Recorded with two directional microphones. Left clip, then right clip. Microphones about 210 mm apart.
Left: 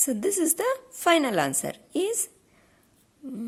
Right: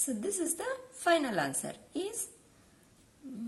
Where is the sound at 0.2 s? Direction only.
50° left (ahead or behind).